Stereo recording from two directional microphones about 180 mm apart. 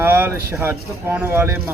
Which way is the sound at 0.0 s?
10° right (ahead or behind).